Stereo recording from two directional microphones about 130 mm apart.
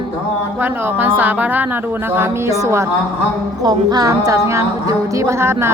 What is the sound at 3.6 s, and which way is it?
A woman's voice, 30° right (ahead or behind).